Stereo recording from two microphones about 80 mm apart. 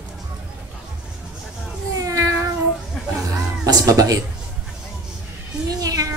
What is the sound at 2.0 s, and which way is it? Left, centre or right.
Cat, right.